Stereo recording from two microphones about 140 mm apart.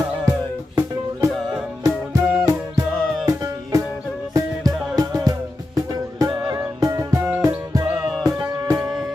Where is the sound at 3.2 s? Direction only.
25° right (ahead or behind).